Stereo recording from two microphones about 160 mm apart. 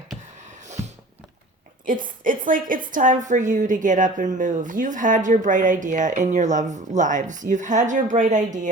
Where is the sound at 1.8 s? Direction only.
55° right (ahead or behind).